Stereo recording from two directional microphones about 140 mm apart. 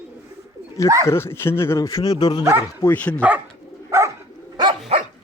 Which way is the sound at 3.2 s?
10° right (ahead or behind).